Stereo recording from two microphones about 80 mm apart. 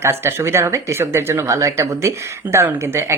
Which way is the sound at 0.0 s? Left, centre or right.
Right.